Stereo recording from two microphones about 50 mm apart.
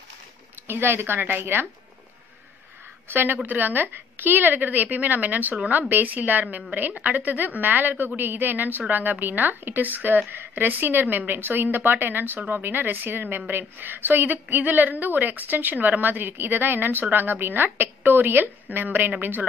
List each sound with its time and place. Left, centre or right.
0.7 s a woman's voice: right
3.1 s a woman's voice: right